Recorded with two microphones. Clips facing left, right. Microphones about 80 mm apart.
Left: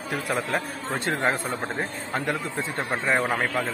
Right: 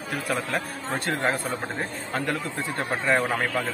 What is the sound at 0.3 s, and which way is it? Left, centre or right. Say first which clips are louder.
A man's voice: left 1 dB; left.